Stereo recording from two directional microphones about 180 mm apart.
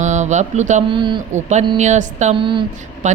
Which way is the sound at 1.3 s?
40° right (ahead or behind).